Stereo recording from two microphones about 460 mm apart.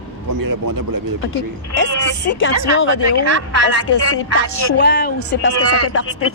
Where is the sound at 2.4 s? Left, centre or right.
Left.